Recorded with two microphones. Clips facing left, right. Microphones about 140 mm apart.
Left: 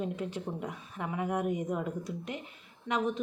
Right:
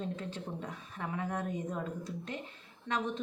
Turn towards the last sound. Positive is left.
turn(degrees=10)  # may be behind; listen again after turning